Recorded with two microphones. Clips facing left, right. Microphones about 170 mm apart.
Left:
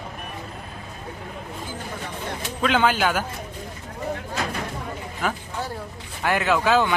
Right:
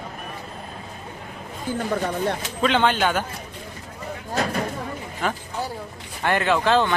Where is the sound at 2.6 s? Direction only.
5° left (ahead or behind).